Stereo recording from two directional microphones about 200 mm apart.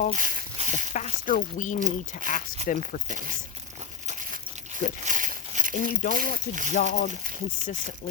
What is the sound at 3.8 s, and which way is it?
Crumpling, 40° right (ahead or behind).